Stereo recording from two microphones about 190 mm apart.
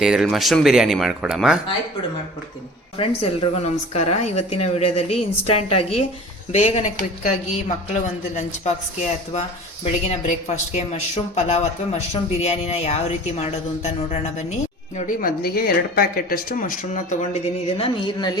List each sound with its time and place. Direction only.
0.0 s speech: centre (ahead or behind)
3.4 s speech: 35° left (ahead or behind)
8.4 s speech: 35° left (ahead or behind)